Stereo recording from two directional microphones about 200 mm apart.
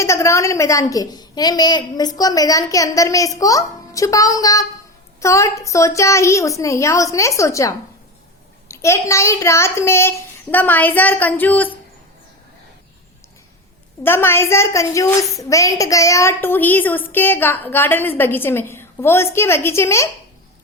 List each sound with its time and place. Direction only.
0.0 s a woman's voice: 15° left (ahead or behind)
14.0 s a woman's voice: 10° left (ahead or behind)